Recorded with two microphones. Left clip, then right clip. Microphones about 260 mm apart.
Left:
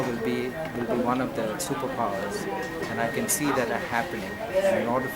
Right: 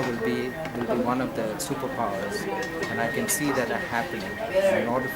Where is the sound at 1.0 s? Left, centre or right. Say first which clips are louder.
Left 2 dB; centre.